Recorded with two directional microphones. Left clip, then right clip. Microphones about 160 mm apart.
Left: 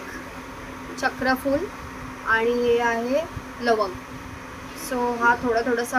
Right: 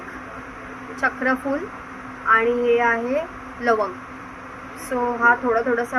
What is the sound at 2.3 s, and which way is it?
Speech, 15° left (ahead or behind).